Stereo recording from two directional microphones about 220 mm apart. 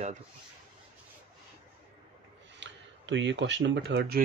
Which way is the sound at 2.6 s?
55° right (ahead or behind).